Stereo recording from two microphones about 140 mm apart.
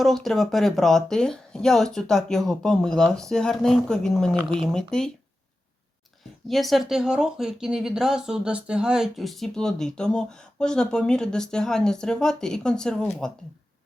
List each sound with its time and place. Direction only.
0.0 s speech: centre (ahead or behind)
6.5 s speech: centre (ahead or behind)